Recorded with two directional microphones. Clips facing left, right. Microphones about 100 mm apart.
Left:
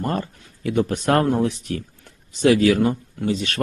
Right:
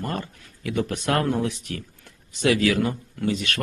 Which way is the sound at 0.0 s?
35° left (ahead or behind).